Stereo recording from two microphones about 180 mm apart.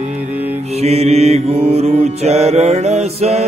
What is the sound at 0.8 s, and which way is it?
Mantra, 35° right (ahead or behind).